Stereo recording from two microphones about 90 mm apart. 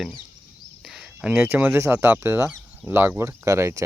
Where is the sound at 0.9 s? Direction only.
5° right (ahead or behind).